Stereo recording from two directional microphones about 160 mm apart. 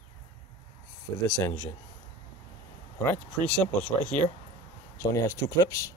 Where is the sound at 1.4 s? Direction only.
20° left (ahead or behind).